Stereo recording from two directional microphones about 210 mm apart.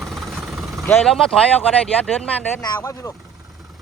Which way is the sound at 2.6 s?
15° left (ahead or behind).